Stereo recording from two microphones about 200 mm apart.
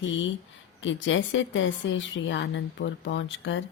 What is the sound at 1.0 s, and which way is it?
A woman's voice, 70° left (ahead or behind).